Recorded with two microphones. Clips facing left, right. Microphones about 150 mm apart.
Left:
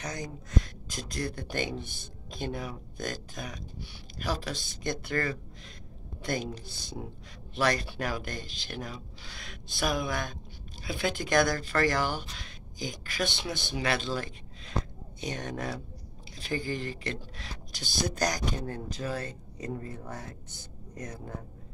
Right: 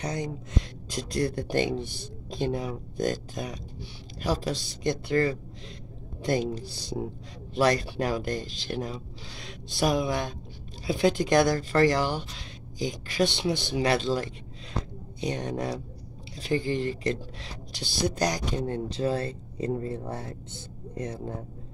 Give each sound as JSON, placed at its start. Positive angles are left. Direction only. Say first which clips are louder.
{"t": 0.0, "sound": "speech", "louder": "right 6 dB", "side_deg": -30}